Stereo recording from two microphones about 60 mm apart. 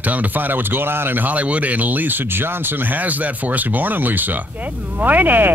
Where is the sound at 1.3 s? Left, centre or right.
Right.